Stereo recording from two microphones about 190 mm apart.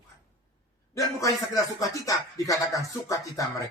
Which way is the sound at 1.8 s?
15° left (ahead or behind).